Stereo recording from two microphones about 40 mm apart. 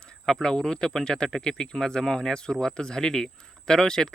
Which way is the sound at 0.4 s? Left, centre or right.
Centre.